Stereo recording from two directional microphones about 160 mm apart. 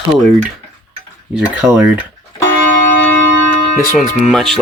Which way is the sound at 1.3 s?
5° right (ahead or behind).